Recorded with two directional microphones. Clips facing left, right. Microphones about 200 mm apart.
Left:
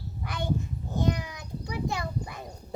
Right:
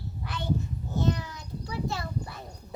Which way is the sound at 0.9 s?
15° left (ahead or behind).